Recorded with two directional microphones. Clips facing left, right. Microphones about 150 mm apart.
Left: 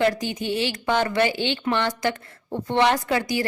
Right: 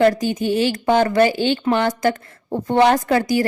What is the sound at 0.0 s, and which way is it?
A woman's voice, 45° right (ahead or behind).